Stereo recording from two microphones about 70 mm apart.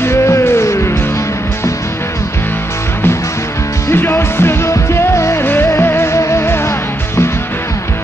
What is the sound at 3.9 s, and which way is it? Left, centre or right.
Music, left.